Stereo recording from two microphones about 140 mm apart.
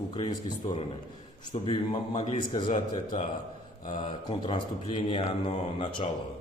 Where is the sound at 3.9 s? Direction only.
35° left (ahead or behind).